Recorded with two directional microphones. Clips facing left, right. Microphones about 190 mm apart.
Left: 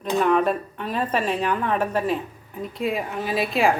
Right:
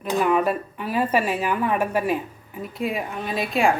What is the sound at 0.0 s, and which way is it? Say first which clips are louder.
A woman's voice: left 1 dB; 5° right (ahead or behind).